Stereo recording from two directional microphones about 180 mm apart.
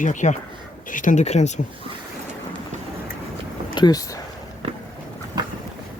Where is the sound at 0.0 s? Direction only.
45° left (ahead or behind).